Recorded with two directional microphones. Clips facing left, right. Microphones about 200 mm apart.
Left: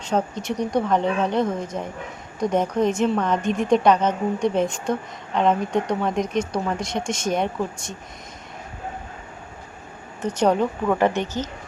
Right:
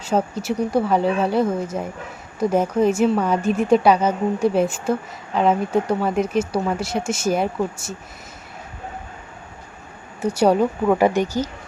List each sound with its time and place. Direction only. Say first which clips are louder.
0.0 s a woman's voice: right 2 dB; 5° right (ahead or behind)
10.2 s a woman's voice: right 3 dB; 10° right (ahead or behind)